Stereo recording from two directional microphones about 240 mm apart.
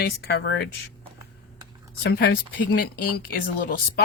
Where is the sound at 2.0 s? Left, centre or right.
Left.